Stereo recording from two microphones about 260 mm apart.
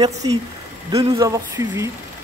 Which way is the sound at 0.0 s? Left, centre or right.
Centre.